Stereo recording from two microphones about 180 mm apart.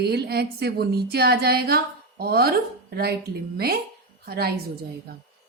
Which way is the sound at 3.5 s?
60° right (ahead or behind).